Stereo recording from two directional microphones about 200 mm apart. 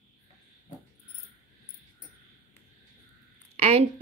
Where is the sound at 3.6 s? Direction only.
30° right (ahead or behind).